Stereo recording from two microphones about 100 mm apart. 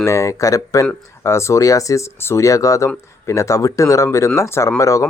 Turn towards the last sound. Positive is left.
turn(degrees=35)  # may be behind; listen again after turning